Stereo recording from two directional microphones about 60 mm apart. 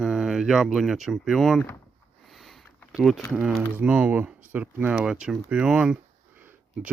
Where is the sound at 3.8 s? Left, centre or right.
Centre.